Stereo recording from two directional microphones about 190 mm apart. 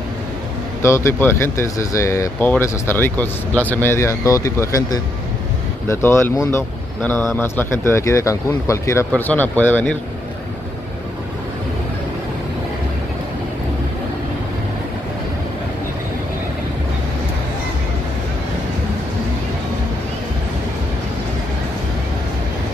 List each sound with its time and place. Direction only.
0.8 s speech: 15° left (ahead or behind)